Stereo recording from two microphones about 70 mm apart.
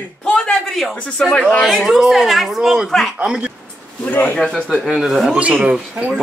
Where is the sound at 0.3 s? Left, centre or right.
Centre.